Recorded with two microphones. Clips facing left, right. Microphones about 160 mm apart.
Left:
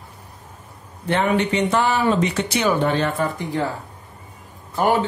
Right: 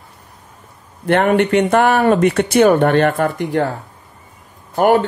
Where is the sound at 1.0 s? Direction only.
60° right (ahead or behind).